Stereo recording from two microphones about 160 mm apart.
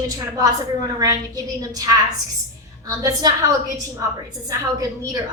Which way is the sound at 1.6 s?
25° right (ahead or behind).